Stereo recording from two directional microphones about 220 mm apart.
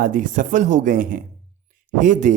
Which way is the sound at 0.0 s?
40° right (ahead or behind).